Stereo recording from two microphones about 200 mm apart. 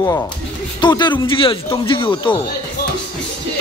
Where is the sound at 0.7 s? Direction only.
20° left (ahead or behind).